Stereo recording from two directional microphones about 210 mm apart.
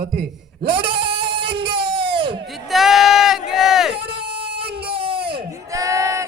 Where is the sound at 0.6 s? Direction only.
25° right (ahead or behind).